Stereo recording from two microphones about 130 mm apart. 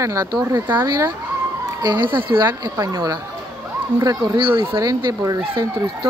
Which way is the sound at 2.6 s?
25° right (ahead or behind).